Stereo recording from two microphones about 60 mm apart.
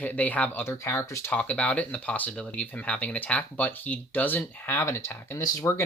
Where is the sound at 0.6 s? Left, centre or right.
Left.